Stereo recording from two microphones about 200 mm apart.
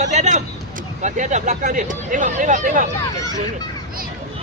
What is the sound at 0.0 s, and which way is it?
Speech, 35° right (ahead or behind).